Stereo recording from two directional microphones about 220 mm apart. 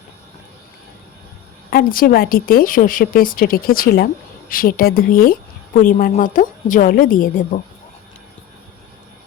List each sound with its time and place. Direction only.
1.7 s a woman's voice: 40° left (ahead or behind)